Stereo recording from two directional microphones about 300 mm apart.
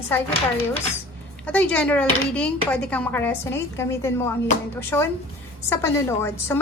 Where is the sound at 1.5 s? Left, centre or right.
Centre.